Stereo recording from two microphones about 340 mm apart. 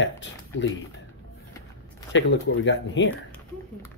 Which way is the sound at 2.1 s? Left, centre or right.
Left.